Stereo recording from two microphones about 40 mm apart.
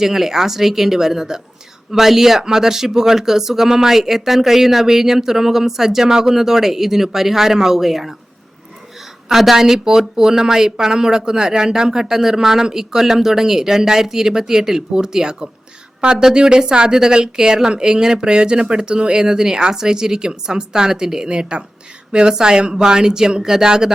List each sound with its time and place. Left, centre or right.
0.0 s speech: centre
9.3 s speech: centre